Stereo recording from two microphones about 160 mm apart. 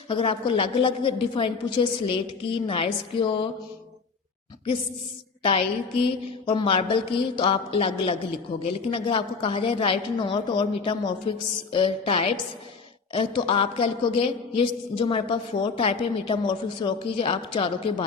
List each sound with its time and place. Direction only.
0.1 s speech: 30° left (ahead or behind)
5.4 s speech: 35° left (ahead or behind)